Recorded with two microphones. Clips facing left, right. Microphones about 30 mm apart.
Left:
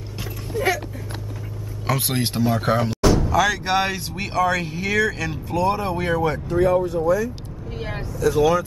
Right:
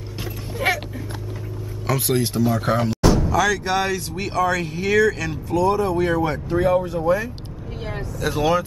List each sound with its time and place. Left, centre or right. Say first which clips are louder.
0.5 s a sound: even; right
1.9 s speech: right 2 dB; centre
2.2 s speech: right 1 dB; left
2.6 s speech: even; centre; by 5.9 s left
5.9 s speech: right 1 dB; centre
6.5 s speech: even; centre
7.8 s vehicle: even; centre
8.3 s speech: left 2 dB; right